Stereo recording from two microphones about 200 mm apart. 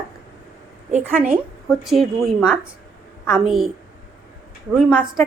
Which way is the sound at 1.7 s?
Centre (ahead or behind).